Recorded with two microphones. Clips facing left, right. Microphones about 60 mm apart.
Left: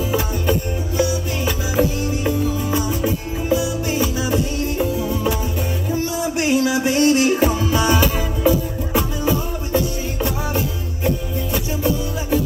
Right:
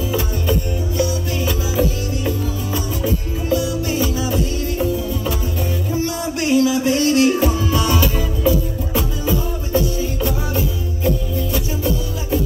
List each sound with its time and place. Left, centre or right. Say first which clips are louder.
0.1 s music: left 1 dB; left
6.7 s music: even; centre